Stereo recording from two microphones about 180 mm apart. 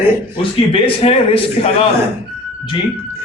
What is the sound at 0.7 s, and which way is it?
A man's voice, 30° left (ahead or behind).